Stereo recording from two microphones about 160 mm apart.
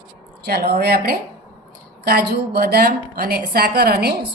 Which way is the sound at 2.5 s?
75° right (ahead or behind).